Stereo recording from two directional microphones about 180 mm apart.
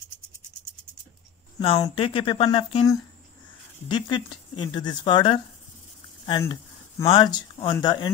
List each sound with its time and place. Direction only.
1.6 s speech: 30° left (ahead or behind)
6.4 s a sound: 15° left (ahead or behind)
7.1 s speech: 25° left (ahead or behind)